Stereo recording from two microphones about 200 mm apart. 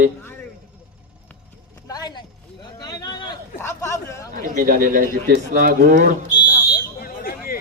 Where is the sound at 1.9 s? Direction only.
20° left (ahead or behind).